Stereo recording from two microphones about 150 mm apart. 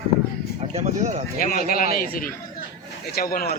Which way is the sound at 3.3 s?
80° left.